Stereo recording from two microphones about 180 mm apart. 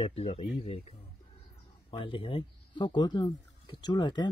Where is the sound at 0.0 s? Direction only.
35° left (ahead or behind).